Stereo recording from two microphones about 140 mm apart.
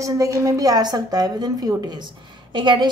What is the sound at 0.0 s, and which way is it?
A woman's voice, 25° right (ahead or behind).